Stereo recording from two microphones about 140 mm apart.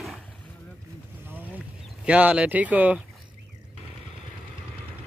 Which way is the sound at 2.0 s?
10° right (ahead or behind).